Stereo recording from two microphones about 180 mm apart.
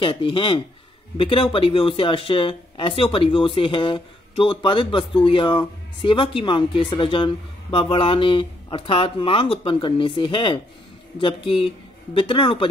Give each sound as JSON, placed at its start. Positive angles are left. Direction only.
{"t": 0.0, "sound": "speech", "side_deg": 30}